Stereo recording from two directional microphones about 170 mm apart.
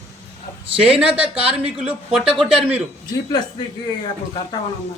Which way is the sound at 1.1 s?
5° right (ahead or behind).